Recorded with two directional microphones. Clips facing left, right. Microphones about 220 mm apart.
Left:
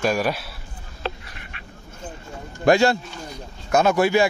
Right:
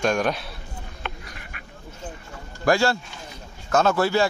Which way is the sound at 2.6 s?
20° left (ahead or behind).